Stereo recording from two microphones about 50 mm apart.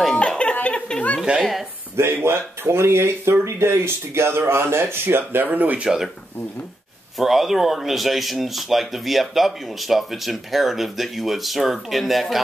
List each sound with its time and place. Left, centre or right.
0.1 s music: centre
0.7 s a sound: centre
1.3 s a sound: right
2.0 s speech: right
5.5 s speech: right
7.2 s speech: centre